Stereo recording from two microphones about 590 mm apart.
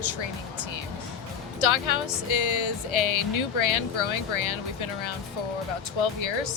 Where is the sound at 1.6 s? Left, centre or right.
Left.